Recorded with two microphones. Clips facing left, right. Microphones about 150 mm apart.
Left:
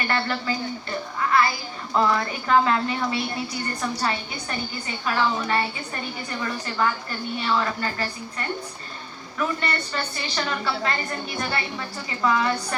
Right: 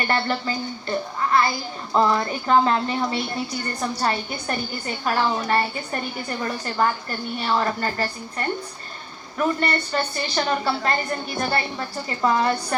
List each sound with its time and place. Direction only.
0.1 s a woman's voice: 30° right (ahead or behind)